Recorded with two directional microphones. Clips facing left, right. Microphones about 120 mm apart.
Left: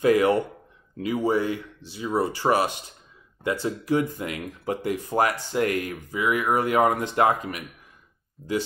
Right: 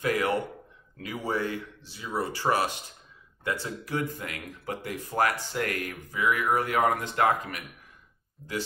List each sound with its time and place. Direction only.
0.0 s speech: 20° left (ahead or behind)
8.4 s speech: 5° left (ahead or behind)